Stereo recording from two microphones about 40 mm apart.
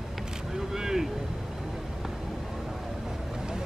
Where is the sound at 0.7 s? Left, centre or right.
Centre.